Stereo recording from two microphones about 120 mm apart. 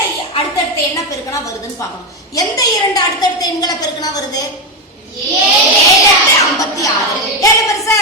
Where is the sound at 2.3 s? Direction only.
30° left (ahead or behind).